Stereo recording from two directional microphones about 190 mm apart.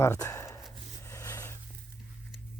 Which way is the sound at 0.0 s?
15° left (ahead or behind).